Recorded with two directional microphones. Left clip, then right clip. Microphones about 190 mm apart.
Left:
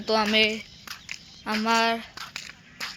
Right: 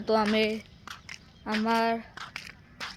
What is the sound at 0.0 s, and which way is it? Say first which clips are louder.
Speech: left 3 dB; 15° right (ahead or behind).